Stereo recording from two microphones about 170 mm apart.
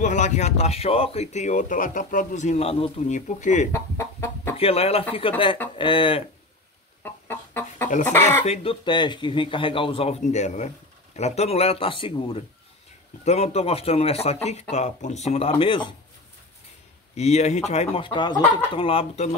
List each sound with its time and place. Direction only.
0.0 s speech: 45° left (ahead or behind)
3.7 s chicken: 15° left (ahead or behind)
4.6 s speech: 35° left (ahead or behind)
7.0 s chicken: 10° left (ahead or behind)
8.5 s speech: 30° left (ahead or behind)
17.1 s speech: 40° left (ahead or behind)